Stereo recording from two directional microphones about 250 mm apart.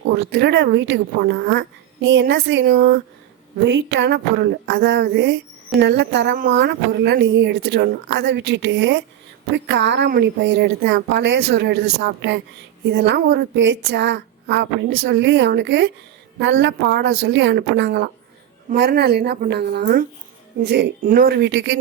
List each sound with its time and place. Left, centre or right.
0.0 s speech: right
3.6 s speech: right